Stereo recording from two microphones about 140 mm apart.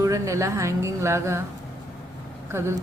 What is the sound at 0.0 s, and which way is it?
A woman's voice, 20° right (ahead or behind).